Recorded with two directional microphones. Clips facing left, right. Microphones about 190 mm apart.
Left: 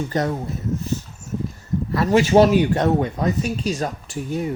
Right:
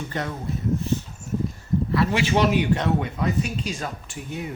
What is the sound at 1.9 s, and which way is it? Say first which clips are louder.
Speech: left 7 dB; 40° left (ahead or behind).